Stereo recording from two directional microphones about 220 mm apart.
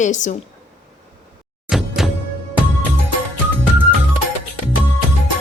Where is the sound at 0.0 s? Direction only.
35° left (ahead or behind).